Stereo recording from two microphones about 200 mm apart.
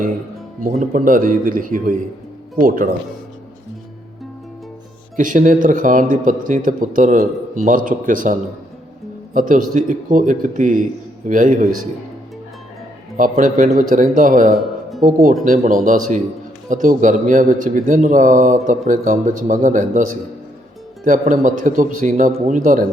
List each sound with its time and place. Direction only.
0.6 s speech: 45° right (ahead or behind)
5.1 s a man's voice: 40° right (ahead or behind)
13.1 s a man's voice: 40° right (ahead or behind)
14.5 s music: centre (ahead or behind)
15.0 s a man's voice: 40° right (ahead or behind)